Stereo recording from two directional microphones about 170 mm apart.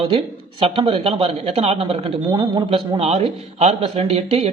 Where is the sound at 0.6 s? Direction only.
30° right (ahead or behind).